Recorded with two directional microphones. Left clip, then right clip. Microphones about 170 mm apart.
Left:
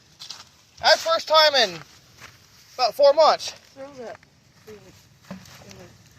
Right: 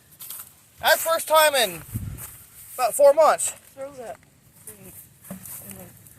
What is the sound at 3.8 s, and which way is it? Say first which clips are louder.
Speech: right 2 dB; 50° left (ahead or behind).